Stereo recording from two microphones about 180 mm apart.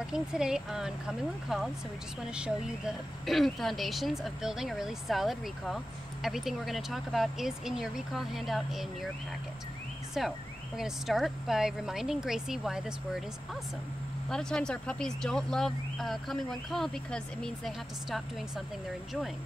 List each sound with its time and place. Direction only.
0.0 s speech: 5° right (ahead or behind)
3.3 s speech: centre (ahead or behind)
10.2 s speech: centre (ahead or behind)
14.3 s speech: 5° left (ahead or behind)